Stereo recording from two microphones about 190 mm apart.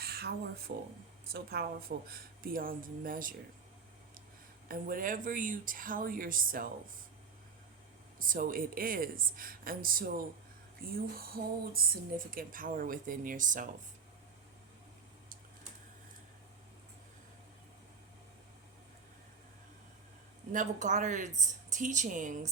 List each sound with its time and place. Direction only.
0.0 s a sound: 55° right (ahead or behind)
0.7 s speech: 50° right (ahead or behind)
4.7 s speech: 50° right (ahead or behind)
8.2 s speech: 45° right (ahead or behind)
20.5 s speech: 40° right (ahead or behind)